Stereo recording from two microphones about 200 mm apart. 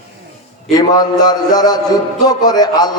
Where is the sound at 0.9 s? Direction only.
20° left (ahead or behind).